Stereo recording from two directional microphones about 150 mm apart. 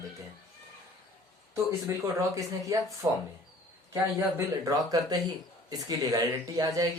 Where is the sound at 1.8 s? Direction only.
20° right (ahead or behind).